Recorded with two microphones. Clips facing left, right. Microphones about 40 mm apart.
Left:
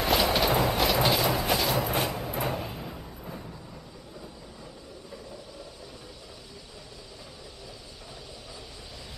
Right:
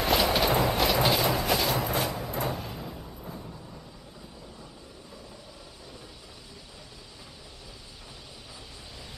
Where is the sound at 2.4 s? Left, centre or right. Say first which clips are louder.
Left 2 dB; centre.